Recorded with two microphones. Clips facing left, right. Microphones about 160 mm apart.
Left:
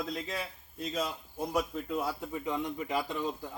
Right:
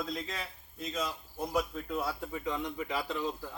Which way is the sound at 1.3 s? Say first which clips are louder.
Left 1 dB; centre (ahead or behind).